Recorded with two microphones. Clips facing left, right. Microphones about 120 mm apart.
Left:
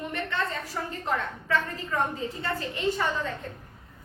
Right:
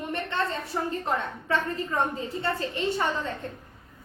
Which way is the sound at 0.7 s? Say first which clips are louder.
Right 2 dB; 25° right (ahead or behind).